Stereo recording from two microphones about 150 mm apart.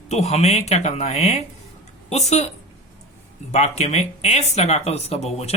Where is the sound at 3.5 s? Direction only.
45° left (ahead or behind).